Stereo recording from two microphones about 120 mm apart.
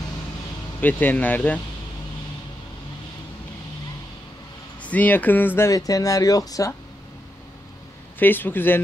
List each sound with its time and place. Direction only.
0.7 s speech: 15° left (ahead or behind)
4.8 s speech: 15° left (ahead or behind)
5.7 s speech: 30° left (ahead or behind)
8.2 s speech: 15° left (ahead or behind)